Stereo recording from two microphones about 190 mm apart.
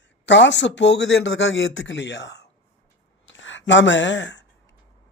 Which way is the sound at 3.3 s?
75° left (ahead or behind).